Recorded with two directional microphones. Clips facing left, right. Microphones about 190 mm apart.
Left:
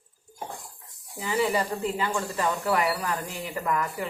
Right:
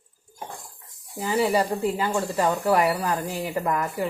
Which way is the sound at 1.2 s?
40° right (ahead or behind).